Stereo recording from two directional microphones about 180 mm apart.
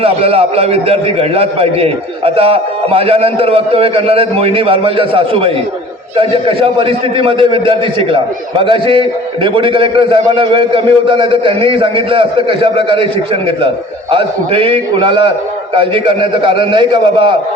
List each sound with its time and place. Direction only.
0.0 s a man's voice: 35° right (ahead or behind)
14.1 s a man's voice: 30° right (ahead or behind)